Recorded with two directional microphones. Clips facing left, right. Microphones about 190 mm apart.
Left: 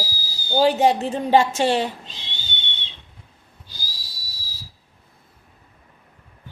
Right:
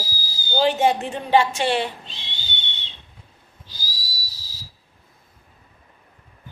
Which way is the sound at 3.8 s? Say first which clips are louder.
Right 6 dB; 60° left (ahead or behind).